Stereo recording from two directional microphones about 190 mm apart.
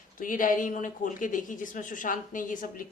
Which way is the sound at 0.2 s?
45° left (ahead or behind).